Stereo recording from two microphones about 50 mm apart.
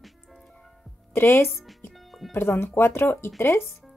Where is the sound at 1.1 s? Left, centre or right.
Left.